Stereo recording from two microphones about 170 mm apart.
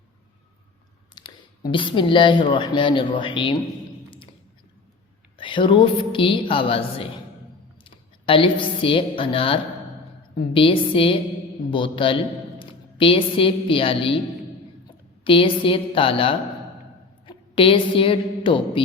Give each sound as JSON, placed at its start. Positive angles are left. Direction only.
{"t": 1.2, "sound": "a sound", "side_deg": 25}
{"t": 1.7, "sound": "speech", "side_deg": 30}
{"t": 5.4, "sound": "a woman's voice", "side_deg": 30}
{"t": 15.2, "sound": "a woman's voice", "side_deg": 30}